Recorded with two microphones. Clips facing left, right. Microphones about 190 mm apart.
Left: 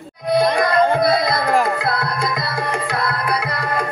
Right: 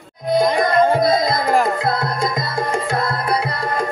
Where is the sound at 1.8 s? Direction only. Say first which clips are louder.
Right 2 dB; 25° right (ahead or behind).